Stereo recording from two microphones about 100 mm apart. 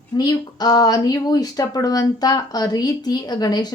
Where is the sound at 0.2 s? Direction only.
40° left (ahead or behind).